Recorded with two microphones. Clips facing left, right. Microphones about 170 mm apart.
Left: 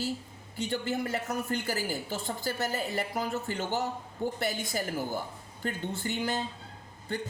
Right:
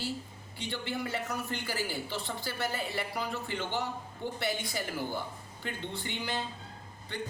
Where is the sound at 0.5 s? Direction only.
45° left (ahead or behind).